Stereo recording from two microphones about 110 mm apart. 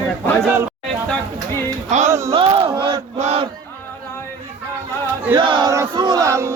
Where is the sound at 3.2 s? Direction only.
70° right (ahead or behind).